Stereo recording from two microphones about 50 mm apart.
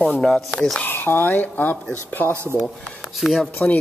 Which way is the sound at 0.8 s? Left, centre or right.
Left.